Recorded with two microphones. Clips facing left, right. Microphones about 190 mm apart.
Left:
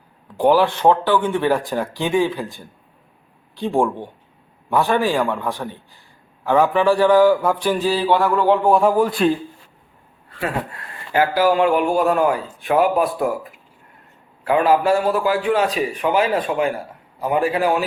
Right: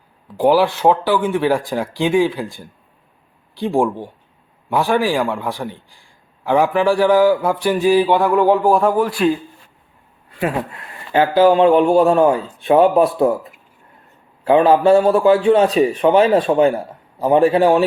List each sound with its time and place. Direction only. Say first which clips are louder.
0.3 s speech: right 1 dB; 10° right (ahead or behind)
8.6 s speech: right 1 dB; centre (ahead or behind)
9.0 s speech: right 1 dB; 20° left (ahead or behind)
10.2 s speech: right 4 dB; 20° right (ahead or behind)